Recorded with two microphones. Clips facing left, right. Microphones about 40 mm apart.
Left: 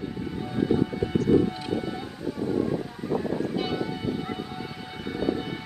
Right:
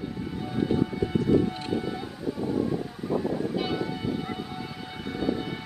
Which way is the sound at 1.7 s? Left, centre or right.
Centre.